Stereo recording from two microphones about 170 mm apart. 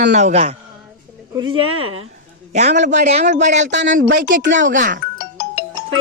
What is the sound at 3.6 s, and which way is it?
Speech, 90° right.